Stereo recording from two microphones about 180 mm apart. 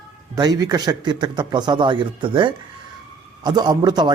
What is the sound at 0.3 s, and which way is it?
A man's voice, 20° right (ahead or behind).